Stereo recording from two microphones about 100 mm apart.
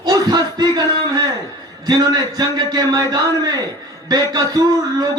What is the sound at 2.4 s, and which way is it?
A man's voice, 35° right (ahead or behind).